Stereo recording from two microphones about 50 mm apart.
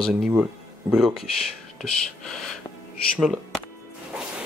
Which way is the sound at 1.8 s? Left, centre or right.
Centre.